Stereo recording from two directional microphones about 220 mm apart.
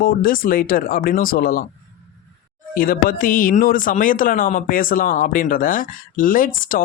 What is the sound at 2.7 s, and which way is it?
Speech, 40° left (ahead or behind).